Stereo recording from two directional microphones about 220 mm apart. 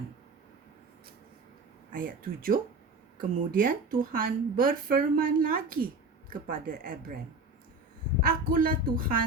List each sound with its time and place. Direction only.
1.9 s a woman's voice: 40° right (ahead or behind)
8.2 s a woman's voice: 40° right (ahead or behind)